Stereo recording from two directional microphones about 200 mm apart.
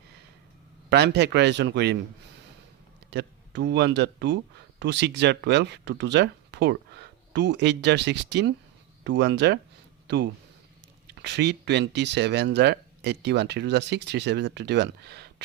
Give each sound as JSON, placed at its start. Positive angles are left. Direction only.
{"t": 0.9, "sound": "speech", "side_deg": -55}
{"t": 3.1, "sound": "speech", "side_deg": -60}